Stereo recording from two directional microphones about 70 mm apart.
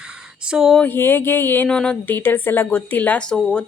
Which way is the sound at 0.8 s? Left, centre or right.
Left.